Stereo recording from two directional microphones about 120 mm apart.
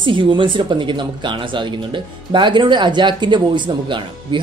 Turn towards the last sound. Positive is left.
turn(degrees=-40)  # may be behind; listen again after turning